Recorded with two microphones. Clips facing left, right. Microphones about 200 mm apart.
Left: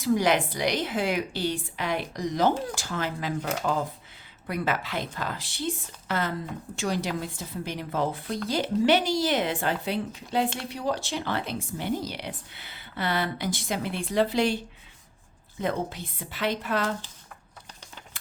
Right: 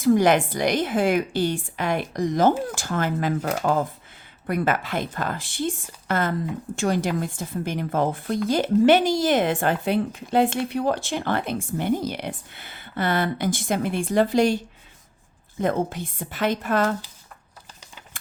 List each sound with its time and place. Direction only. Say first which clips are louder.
0.0 s a woman's voice: right 6 dB; 50° right (ahead or behind)
15.6 s a woman's voice: right 5 dB; 50° right (ahead or behind)